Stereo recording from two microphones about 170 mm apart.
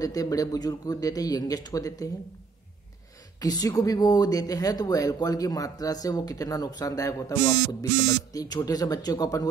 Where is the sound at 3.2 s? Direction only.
20° left (ahead or behind).